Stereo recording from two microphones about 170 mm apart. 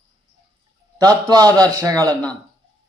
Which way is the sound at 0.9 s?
20° right (ahead or behind).